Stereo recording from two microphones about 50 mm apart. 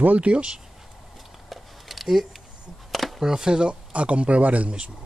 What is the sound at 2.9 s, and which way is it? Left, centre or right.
Speech, centre.